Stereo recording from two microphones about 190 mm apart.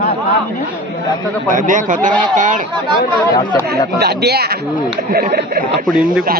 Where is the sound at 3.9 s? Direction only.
55° right (ahead or behind).